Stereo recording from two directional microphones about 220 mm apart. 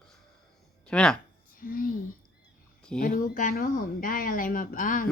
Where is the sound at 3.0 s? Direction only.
40° left (ahead or behind).